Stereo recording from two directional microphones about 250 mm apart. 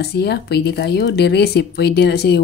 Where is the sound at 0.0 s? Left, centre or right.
Left.